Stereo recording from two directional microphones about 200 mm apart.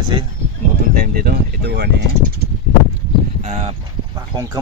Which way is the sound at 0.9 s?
45° right (ahead or behind).